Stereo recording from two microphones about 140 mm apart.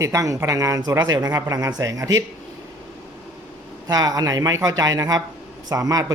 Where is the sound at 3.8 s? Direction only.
25° right (ahead or behind).